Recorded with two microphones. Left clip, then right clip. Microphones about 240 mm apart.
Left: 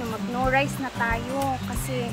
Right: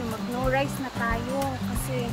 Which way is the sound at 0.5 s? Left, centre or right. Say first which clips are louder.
Left 2 dB; centre.